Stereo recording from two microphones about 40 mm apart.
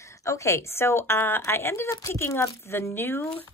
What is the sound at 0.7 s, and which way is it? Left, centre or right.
A woman's voice, left.